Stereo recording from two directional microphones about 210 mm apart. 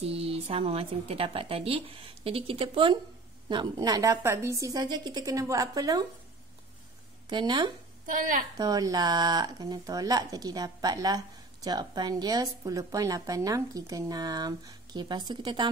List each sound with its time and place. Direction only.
0.0 s speech: 30° right (ahead or behind)
7.2 s speech: 20° right (ahead or behind)
8.1 s a woman's voice: 40° right (ahead or behind)
8.5 s speech: 15° right (ahead or behind)